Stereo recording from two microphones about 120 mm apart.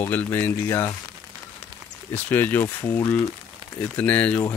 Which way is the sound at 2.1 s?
15° left (ahead or behind).